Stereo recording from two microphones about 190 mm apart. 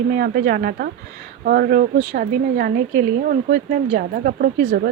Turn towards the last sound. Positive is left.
turn(degrees=-50)  # may be behind; listen again after turning